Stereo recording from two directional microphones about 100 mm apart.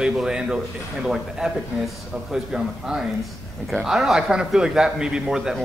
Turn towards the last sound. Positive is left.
turn(degrees=-5)  # may be behind; listen again after turning